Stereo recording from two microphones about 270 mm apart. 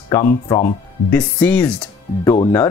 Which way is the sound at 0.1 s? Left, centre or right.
Centre.